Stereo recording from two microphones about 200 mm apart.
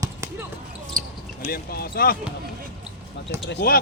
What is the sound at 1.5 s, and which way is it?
Speech, 50° left (ahead or behind).